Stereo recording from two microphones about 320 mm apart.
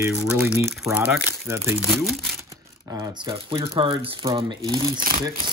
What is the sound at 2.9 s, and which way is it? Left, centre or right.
Speech, centre.